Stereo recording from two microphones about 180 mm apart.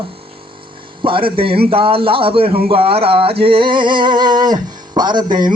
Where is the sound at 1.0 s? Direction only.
30° right (ahead or behind).